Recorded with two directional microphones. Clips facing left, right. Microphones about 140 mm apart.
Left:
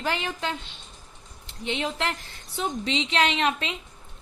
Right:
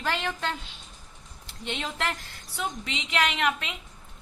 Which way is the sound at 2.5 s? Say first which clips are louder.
Left 5 dB; 30° left (ahead or behind).